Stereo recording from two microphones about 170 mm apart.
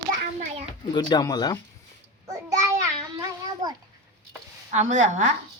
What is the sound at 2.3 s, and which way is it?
Child singing, 20° right (ahead or behind).